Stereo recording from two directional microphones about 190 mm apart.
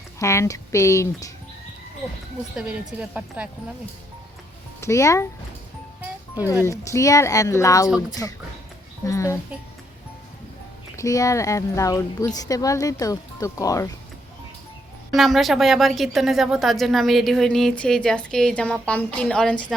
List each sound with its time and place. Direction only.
0.2 s speech: 15° left (ahead or behind)
2.6 s a woman's voice: 5° right (ahead or behind)
4.8 s speech: 15° left (ahead or behind)
6.3 s speech: 15° left (ahead or behind)
9.0 s speech: 15° left (ahead or behind)
10.9 s speech: 15° left (ahead or behind)
15.1 s a woman's voice: centre (ahead or behind)